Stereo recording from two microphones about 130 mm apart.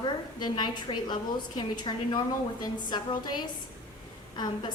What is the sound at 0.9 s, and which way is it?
A woman's voice, 35° left (ahead or behind).